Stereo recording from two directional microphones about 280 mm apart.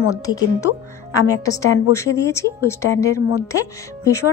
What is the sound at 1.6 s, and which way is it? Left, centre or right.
Speech, left.